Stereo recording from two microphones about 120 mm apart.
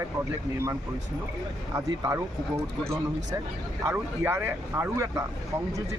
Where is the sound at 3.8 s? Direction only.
20° right (ahead or behind).